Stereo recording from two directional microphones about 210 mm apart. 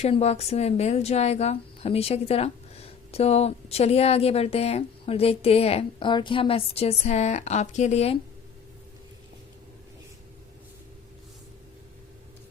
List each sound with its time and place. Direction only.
0.0 s speech: 30° left (ahead or behind)